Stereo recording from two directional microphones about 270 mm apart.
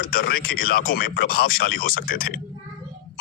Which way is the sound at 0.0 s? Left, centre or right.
Left.